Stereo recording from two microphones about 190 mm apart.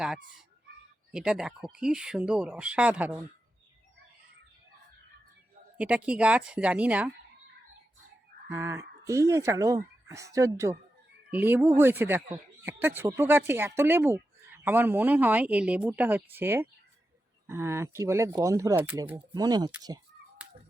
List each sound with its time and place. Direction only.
1.1 s speech: 5° right (ahead or behind)
5.7 s speech: 5° right (ahead or behind)
8.4 s speech: 15° right (ahead or behind)